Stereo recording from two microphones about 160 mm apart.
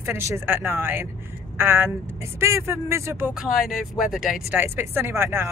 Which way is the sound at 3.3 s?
Centre (ahead or behind).